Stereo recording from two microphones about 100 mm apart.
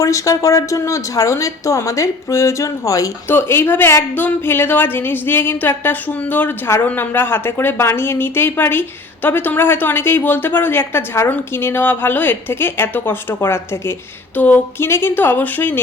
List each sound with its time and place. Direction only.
0.0 s a woman's voice: 30° left (ahead or behind)
3.2 s a woman's voice: 20° left (ahead or behind)